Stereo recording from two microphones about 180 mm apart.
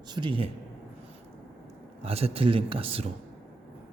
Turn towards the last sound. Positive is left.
turn(degrees=-30)  # may be behind; listen again after turning